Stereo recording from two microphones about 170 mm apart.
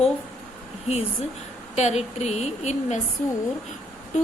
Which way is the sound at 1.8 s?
40° left (ahead or behind).